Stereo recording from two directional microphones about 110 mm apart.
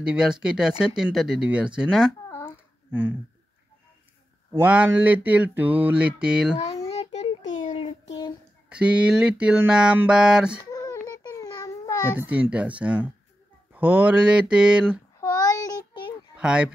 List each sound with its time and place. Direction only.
0.0 s speech: 5° right (ahead or behind)
2.9 s speech: 15° right (ahead or behind)
4.6 s speech: 15° right (ahead or behind)
6.9 s child singing: 75° left (ahead or behind)
8.6 s speech: 10° right (ahead or behind)
10.7 s baby cry: 35° left (ahead or behind)
12.2 s speech: 15° right (ahead or behind)
15.1 s child singing: 30° left (ahead or behind)
16.3 s speech: 10° right (ahead or behind)